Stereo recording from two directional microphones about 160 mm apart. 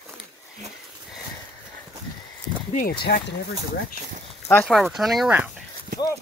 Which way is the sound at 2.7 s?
65° left (ahead or behind).